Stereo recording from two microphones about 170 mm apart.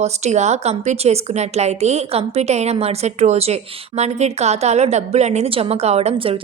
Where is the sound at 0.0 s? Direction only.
45° right (ahead or behind).